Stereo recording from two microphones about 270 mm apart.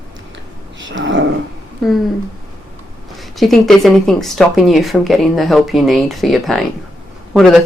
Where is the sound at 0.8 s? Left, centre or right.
Right.